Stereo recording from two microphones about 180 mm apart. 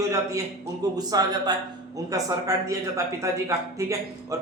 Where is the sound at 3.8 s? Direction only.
15° right (ahead or behind).